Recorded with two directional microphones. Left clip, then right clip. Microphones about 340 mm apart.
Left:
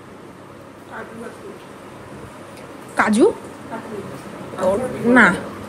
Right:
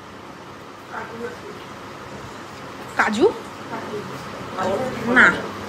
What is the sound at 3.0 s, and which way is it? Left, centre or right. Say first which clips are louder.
Speech: left 3 dB; centre.